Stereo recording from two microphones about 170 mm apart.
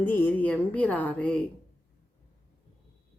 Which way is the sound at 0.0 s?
10° left (ahead or behind).